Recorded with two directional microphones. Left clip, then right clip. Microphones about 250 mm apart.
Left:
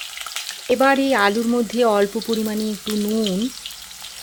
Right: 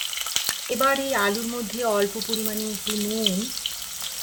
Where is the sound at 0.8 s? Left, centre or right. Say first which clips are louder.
Left 5 dB; left.